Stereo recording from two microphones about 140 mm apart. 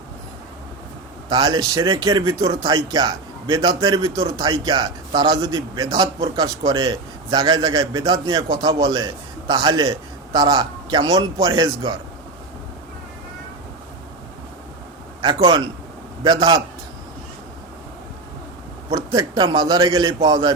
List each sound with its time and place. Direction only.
1.3 s a man's voice: 30° right (ahead or behind)
15.2 s a man's voice: 35° right (ahead or behind)
18.9 s a man's voice: 30° right (ahead or behind)